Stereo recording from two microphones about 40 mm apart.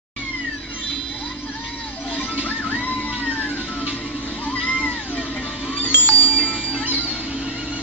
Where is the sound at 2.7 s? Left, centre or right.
Left.